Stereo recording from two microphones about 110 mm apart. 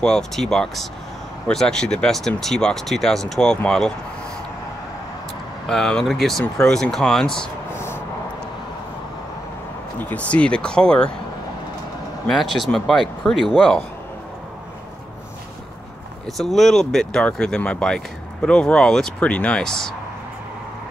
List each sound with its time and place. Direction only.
0.0 s speech: 5° left (ahead or behind)
5.7 s speech: 5° left (ahead or behind)
7.7 s vehicle: 20° left (ahead or behind)
9.9 s speech: 15° left (ahead or behind)
12.3 s speech: centre (ahead or behind)
16.3 s speech: centre (ahead or behind)